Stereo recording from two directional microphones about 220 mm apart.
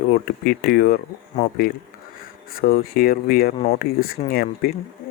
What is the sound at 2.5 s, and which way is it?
Speech, 40° left (ahead or behind).